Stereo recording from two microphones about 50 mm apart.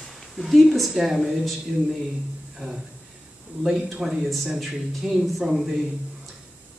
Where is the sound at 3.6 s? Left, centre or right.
Centre.